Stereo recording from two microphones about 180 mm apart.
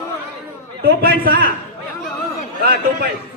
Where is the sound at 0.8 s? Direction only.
55° right (ahead or behind).